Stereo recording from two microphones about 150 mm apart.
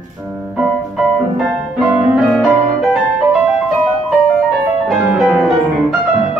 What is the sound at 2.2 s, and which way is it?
Music, centre (ahead or behind).